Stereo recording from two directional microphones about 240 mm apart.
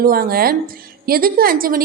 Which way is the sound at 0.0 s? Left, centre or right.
Right.